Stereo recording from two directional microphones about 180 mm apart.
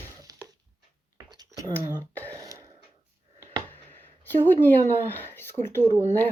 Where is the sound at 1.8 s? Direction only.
10° right (ahead or behind).